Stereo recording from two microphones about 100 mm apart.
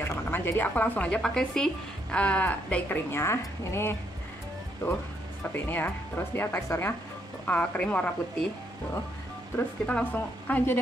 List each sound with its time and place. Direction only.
0.0 s a woman's voice: 20° left (ahead or behind)
5.5 s a woman's voice: 20° left (ahead or behind)
9.8 s a woman's voice: 15° left (ahead or behind)